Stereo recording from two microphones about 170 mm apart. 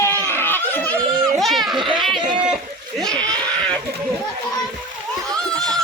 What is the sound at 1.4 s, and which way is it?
Children playing, centre (ahead or behind).